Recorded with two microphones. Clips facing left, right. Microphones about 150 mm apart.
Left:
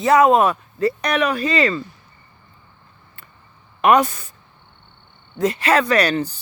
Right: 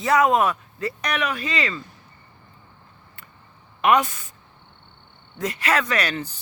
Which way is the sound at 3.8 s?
40° left (ahead or behind).